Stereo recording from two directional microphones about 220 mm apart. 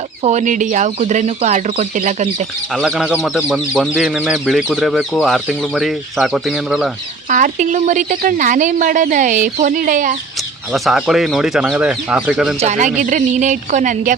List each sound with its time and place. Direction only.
0.2 s speech: 30° right (ahead or behind)
2.7 s speech: centre (ahead or behind)
7.3 s speech: 35° right (ahead or behind)
10.7 s speech: centre (ahead or behind)
12.5 s speech: 30° right (ahead or behind)